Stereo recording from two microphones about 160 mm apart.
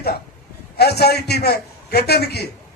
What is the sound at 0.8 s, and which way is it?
A man's voice, 90° left.